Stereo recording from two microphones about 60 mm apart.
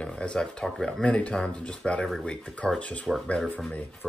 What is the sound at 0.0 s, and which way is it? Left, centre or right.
Speech, centre.